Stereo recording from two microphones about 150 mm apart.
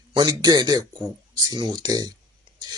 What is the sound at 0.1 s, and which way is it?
Speech, 30° right (ahead or behind).